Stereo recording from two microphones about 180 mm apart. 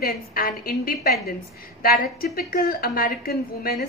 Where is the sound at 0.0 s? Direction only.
55° left (ahead or behind).